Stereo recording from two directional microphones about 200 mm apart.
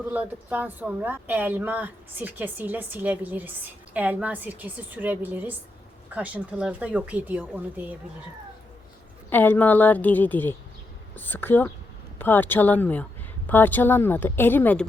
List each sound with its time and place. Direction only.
0.1 s a woman's voice: 10° right (ahead or behind)
9.3 s a woman's voice: 10° left (ahead or behind)